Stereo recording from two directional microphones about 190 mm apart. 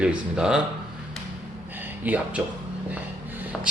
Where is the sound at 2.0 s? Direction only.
5° right (ahead or behind).